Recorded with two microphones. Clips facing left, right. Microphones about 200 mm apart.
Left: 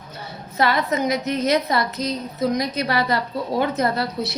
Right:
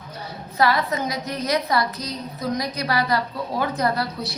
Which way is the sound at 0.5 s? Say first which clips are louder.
Left 1 dB; 25° left (ahead or behind).